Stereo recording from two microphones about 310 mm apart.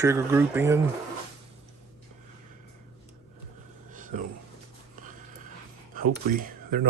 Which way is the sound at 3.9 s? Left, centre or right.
Right.